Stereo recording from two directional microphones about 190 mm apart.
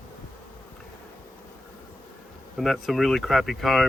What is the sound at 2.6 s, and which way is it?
Speech, centre (ahead or behind).